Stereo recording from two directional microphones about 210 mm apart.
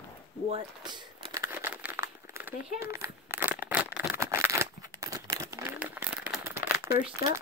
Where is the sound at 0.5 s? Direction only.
25° right (ahead or behind).